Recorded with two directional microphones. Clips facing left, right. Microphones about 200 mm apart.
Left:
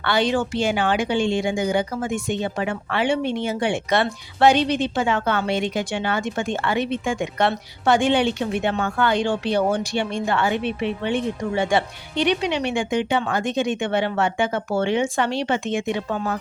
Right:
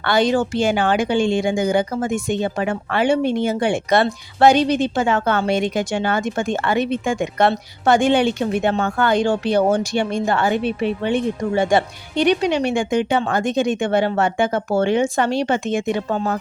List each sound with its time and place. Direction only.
0.0 s a woman's voice: 45° right (ahead or behind)